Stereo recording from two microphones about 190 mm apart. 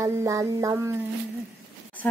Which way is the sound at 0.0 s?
15° right (ahead or behind).